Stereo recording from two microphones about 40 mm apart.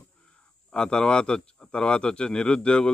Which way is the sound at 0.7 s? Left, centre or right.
Centre.